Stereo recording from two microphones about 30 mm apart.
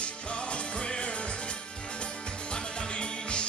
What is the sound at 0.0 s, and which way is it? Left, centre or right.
Music, left.